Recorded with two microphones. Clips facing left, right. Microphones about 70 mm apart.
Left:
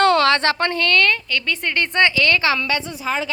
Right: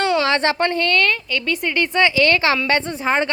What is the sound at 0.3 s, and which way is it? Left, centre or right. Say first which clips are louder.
A woman's voice: even; centre.